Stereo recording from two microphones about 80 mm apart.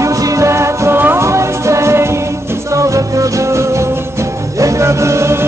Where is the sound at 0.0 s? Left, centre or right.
Right.